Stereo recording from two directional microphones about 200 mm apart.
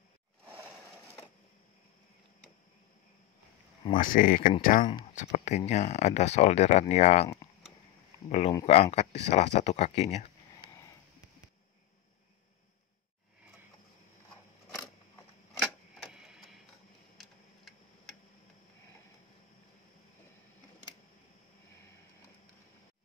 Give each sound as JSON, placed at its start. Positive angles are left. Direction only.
{"t": 3.9, "sound": "speech", "side_deg": 45}
{"t": 8.3, "sound": "speech", "side_deg": 30}
{"t": 10.6, "sound": "a sound", "side_deg": 15}
{"t": 16.1, "sound": "printer", "side_deg": -5}